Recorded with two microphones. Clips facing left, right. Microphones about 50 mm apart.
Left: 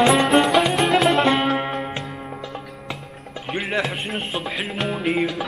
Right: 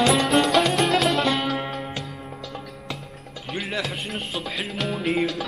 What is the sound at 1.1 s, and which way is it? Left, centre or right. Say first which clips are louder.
Music: left 5 dB; left.